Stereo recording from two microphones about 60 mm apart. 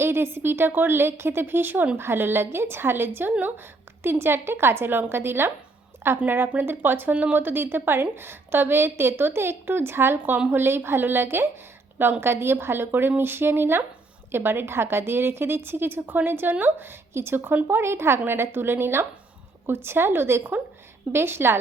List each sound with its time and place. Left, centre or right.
0.0 s a woman's voice: right